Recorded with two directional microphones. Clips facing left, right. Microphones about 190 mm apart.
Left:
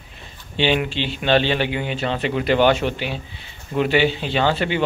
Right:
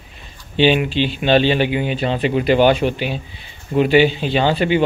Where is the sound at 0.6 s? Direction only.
15° right (ahead or behind).